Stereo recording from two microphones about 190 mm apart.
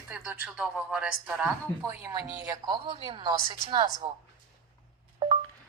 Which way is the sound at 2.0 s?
20° right (ahead or behind).